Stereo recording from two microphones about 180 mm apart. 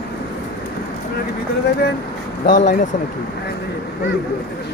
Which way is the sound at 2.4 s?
45° left (ahead or behind).